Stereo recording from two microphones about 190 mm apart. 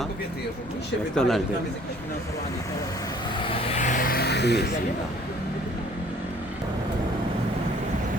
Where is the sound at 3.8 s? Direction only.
45° left (ahead or behind); by 4.7 s 60° left (ahead or behind).